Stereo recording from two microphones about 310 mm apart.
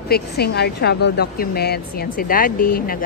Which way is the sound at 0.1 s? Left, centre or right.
Left.